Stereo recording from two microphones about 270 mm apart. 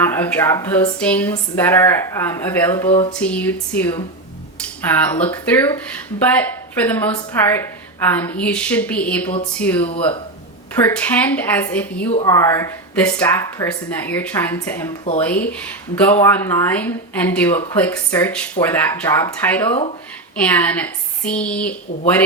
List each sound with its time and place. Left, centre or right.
0.0 s speech: centre
2.8 s a sound: centre
3.2 s a woman's voice: centre